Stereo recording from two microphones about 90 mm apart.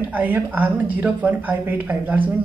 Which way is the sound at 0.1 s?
20° right (ahead or behind).